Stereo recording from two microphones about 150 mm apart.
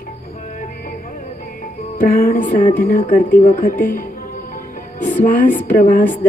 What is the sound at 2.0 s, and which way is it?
Speech, 75° left (ahead or behind).